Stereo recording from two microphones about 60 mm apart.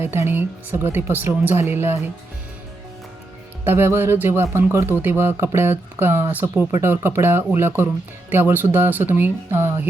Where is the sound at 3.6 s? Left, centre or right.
Right.